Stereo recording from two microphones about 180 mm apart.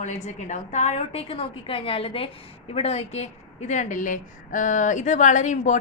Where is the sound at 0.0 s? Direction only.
40° left (ahead or behind).